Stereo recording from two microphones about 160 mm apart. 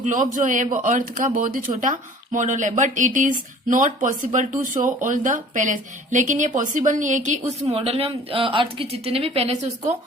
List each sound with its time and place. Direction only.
0.0 s a man's voice: 55° right (ahead or behind)